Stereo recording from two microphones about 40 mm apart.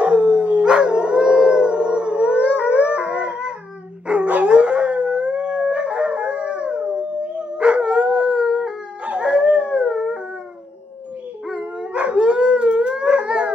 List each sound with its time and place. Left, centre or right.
0.0 s howl: right
11.5 s dog: right